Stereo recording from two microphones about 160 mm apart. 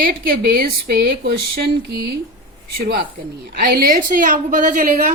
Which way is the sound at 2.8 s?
70° right (ahead or behind).